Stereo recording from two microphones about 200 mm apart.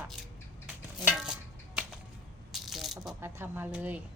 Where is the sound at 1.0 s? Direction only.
5° right (ahead or behind).